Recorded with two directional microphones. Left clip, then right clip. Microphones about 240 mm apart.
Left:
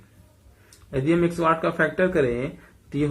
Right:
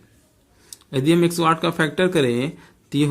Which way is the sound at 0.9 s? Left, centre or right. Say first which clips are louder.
Right 4 dB; right.